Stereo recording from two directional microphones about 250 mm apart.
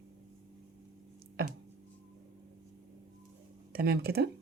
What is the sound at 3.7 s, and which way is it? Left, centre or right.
Speech, right.